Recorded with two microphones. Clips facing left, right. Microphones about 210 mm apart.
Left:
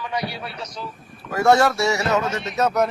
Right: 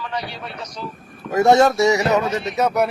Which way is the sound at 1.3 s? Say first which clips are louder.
Right 3 dB; 20° right (ahead or behind).